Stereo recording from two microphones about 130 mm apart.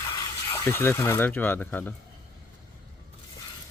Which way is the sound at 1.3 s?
15° left (ahead or behind).